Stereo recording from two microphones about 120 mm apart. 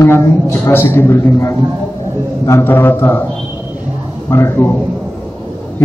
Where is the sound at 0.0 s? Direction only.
20° left (ahead or behind).